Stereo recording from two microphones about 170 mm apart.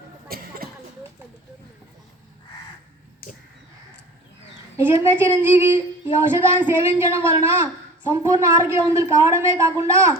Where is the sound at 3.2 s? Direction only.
65° left (ahead or behind).